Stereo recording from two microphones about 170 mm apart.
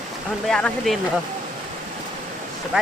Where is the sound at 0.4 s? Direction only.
5° left (ahead or behind).